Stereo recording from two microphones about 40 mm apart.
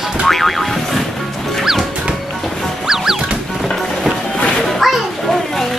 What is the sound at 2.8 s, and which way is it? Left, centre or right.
Music, centre.